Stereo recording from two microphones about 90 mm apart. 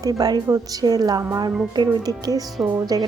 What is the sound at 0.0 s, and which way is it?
A woman's voice, 45° right (ahead or behind).